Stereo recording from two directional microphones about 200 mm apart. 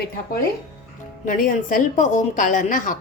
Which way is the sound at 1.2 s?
40° left (ahead or behind).